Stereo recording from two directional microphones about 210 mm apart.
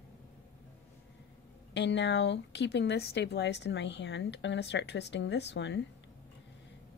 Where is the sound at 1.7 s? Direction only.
55° left (ahead or behind).